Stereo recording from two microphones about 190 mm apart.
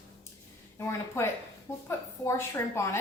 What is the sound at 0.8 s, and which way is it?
A woman's voice, 15° left (ahead or behind).